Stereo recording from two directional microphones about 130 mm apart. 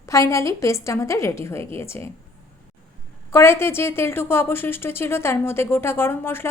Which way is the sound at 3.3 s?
20° left (ahead or behind).